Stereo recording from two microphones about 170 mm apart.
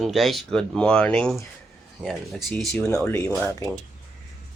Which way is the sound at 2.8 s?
15° left (ahead or behind).